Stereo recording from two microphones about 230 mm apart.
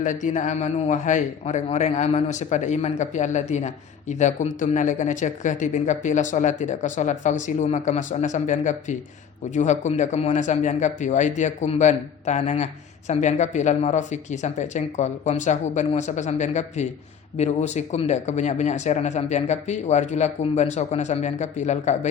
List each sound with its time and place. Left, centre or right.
0.0 s speech: left